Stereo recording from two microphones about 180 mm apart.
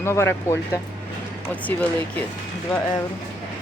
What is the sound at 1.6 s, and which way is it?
Speech, 10° left (ahead or behind).